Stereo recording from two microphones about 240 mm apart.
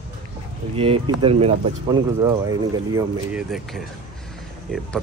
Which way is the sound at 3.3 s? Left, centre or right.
Centre.